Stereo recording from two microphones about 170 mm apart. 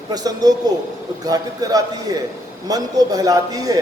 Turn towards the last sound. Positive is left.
turn(degrees=-20)  # may be behind; listen again after turning